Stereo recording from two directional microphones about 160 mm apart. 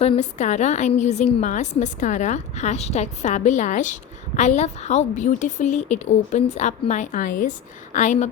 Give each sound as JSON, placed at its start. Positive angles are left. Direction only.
{"t": 0.0, "sound": "a woman's voice", "side_deg": 45}